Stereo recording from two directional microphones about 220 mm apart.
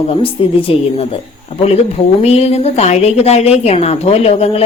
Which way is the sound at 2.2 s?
30° left (ahead or behind).